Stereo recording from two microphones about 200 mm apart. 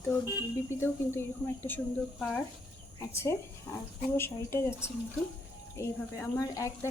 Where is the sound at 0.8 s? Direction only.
10° left (ahead or behind).